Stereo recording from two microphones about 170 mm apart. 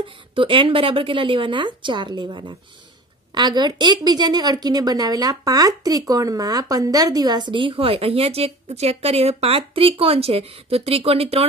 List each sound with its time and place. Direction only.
0.0 s speech: 30° right (ahead or behind)